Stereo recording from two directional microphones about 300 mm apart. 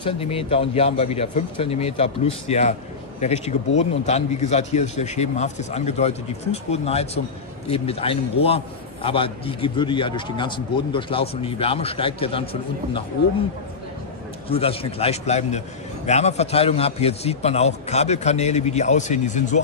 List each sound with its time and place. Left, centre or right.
0.0 s a man's voice: centre
14.5 s a man's voice: centre